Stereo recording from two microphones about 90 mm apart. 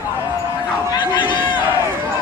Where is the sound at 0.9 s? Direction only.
65° left (ahead or behind).